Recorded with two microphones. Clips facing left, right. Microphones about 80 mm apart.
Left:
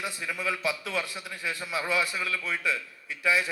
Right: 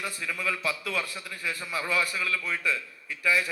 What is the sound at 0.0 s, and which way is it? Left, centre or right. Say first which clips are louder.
A man's voice: even; centre.